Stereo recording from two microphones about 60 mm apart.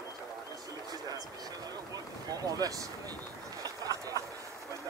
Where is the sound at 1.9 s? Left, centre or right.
Right.